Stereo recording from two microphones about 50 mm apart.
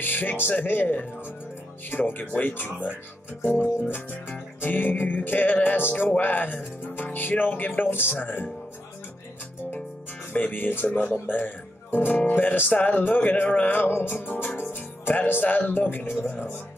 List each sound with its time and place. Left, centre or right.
0.0 s music: left
3.9 s music: left
5.9 s speech: left
10.3 s music: left
11.1 s speech: left
12.1 s music: left
13.7 s music: left